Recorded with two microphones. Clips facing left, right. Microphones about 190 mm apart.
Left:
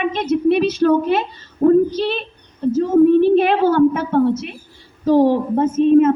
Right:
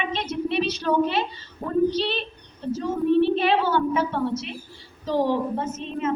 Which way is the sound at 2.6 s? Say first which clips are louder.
Left 11 dB; 50° left (ahead or behind).